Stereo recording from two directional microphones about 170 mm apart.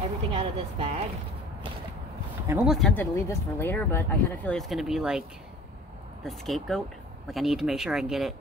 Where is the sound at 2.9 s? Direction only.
15° left (ahead or behind).